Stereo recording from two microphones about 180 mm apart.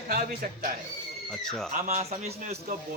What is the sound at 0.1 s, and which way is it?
Speech, 55° right (ahead or behind).